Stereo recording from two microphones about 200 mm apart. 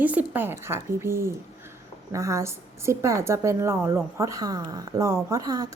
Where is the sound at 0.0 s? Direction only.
10° right (ahead or behind).